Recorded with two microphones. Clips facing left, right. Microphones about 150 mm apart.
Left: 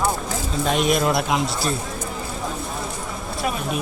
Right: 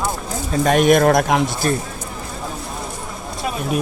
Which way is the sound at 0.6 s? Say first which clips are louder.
Right 7 dB; 55° right (ahead or behind).